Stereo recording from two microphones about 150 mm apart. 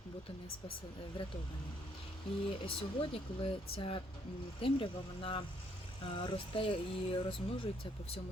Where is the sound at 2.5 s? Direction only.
35° left (ahead or behind).